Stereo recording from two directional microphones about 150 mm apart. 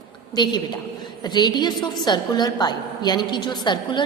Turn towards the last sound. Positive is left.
turn(degrees=30)  # may be behind; listen again after turning